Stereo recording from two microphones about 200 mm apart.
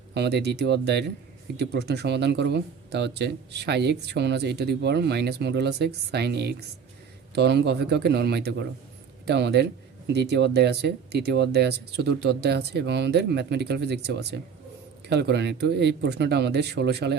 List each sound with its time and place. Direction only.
0.1 s speech: 55° right (ahead or behind)